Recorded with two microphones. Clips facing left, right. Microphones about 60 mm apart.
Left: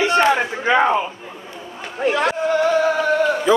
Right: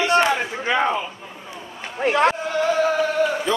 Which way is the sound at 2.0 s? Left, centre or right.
Right.